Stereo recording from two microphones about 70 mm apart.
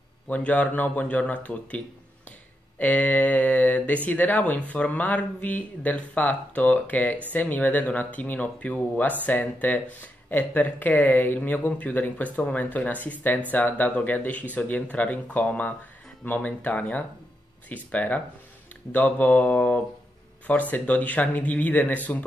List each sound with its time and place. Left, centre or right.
0.3 s speech: centre
2.8 s speech: left